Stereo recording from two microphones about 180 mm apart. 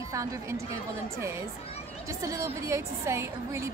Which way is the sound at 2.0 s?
15° right (ahead or behind).